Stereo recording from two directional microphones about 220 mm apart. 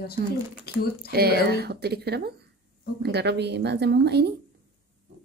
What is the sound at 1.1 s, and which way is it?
A woman's voice, 45° right (ahead or behind).